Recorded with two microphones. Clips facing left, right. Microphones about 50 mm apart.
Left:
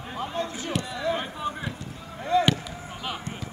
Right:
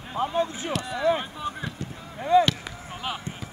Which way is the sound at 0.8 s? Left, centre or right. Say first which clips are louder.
Right 5 dB; right.